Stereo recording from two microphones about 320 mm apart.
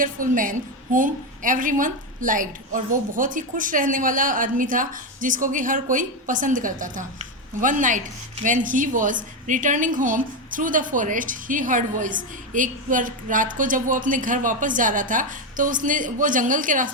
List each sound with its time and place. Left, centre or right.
0.0 s a woman's voice: right